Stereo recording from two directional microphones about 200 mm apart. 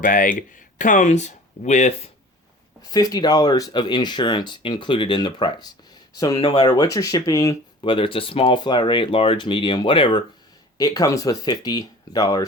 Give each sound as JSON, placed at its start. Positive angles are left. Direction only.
{"t": 0.0, "sound": "speech", "side_deg": 40}
{"t": 2.8, "sound": "speech", "side_deg": 20}